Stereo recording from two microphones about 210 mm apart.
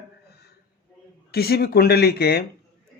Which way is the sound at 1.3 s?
50° left (ahead or behind).